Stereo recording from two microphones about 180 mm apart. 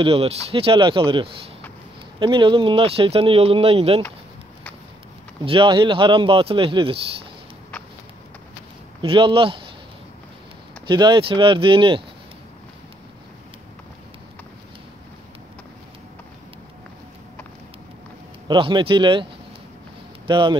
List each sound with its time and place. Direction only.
0.0 s speech: 30° right (ahead or behind)
5.4 s speech: 30° right (ahead or behind)
9.0 s speech: 30° right (ahead or behind)
10.9 s speech: 25° right (ahead or behind)
18.5 s speech: 25° right (ahead or behind)
20.2 s speech: 25° right (ahead or behind)